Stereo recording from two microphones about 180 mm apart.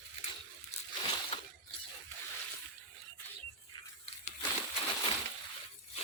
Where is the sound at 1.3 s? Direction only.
30° left (ahead or behind).